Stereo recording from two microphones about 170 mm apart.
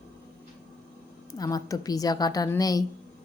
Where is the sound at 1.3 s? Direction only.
20° left (ahead or behind).